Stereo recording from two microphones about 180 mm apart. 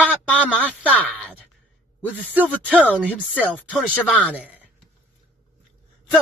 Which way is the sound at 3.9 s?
5° left (ahead or behind).